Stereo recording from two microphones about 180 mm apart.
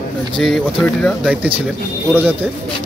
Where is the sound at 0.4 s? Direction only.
5° left (ahead or behind).